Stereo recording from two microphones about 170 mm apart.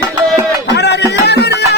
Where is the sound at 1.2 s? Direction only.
80° left.